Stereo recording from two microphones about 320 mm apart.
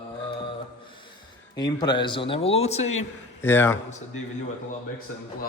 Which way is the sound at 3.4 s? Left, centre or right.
Centre.